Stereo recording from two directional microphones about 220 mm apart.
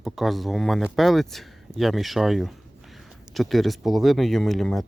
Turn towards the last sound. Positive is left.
turn(degrees=0)  # may be behind; listen again after turning